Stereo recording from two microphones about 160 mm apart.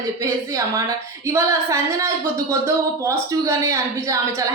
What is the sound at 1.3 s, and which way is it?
Speech, 15° right (ahead or behind).